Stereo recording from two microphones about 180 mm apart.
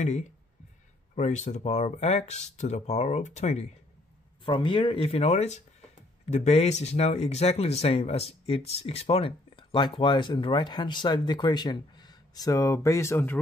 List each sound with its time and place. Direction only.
1.1 s speech: 40° left (ahead or behind)
4.5 s speech: 30° left (ahead or behind); by 13.4 s 10° left (ahead or behind)